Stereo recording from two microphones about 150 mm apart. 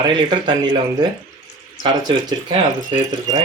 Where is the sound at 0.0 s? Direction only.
30° right (ahead or behind).